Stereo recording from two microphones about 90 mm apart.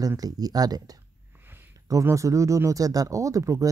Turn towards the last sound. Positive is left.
turn(degrees=-40)  # may be behind; listen again after turning